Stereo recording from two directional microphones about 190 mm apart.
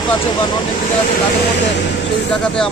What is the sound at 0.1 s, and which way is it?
Speech, 25° left (ahead or behind).